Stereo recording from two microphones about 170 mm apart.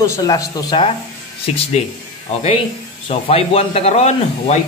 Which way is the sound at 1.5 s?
40° left (ahead or behind).